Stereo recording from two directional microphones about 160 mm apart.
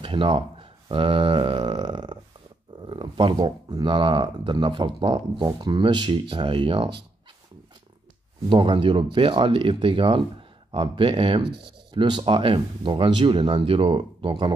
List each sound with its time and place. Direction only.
0.0 s speech: 30° right (ahead or behind)
8.5 s speech: 30° right (ahead or behind)